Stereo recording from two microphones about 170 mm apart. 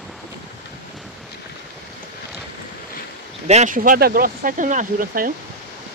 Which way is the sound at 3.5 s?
45° right (ahead or behind).